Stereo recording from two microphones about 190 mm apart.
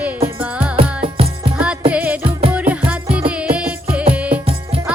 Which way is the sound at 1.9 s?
5° right (ahead or behind).